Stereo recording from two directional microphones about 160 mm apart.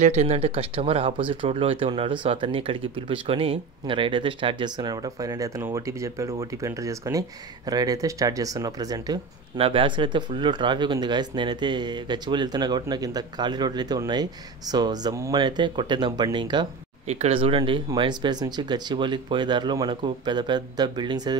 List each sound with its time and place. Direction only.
0.0 s speech: 45° right (ahead or behind); by 21.4 s 25° right (ahead or behind)